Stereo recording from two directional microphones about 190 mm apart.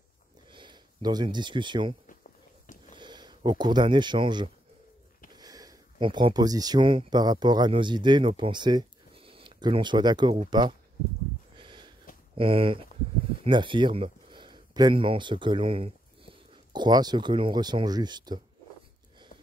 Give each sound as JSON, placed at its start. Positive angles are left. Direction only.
{"t": 0.5, "sound": "speech", "side_deg": -25}
{"t": 2.6, "sound": "sniff", "side_deg": 45}
{"t": 3.0, "sound": "speech", "side_deg": -25}
{"t": 11.5, "sound": "a sound", "side_deg": -25}
{"t": 12.4, "sound": "speech", "side_deg": -30}